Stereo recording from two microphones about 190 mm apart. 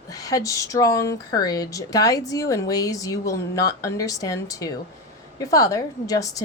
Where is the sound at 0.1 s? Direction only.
20° left (ahead or behind).